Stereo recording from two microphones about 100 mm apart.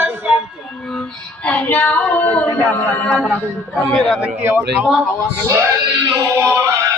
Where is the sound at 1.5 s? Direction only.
15° left (ahead or behind).